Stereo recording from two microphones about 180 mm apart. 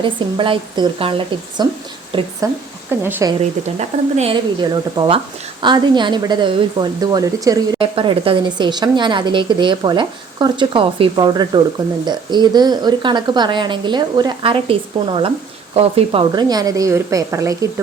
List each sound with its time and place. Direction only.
0.0 s speech: 30° right (ahead or behind)
3.0 s speech: 15° right (ahead or behind)
3.8 s speech: 35° right (ahead or behind)
4.6 s speech: 25° right (ahead or behind)